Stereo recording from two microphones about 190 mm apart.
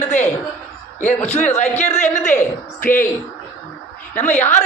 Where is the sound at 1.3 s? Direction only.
35° left (ahead or behind).